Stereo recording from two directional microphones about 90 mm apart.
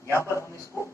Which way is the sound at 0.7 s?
25° left (ahead or behind).